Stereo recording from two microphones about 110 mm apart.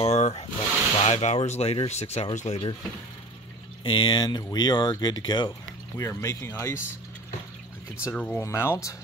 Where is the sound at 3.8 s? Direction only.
50° left (ahead or behind).